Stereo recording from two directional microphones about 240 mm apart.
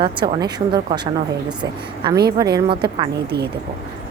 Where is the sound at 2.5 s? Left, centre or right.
Right.